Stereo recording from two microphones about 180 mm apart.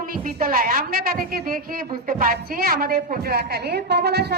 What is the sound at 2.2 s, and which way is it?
A woman's voice, 55° right (ahead or behind).